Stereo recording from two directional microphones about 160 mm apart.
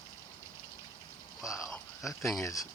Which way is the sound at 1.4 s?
Centre (ahead or behind).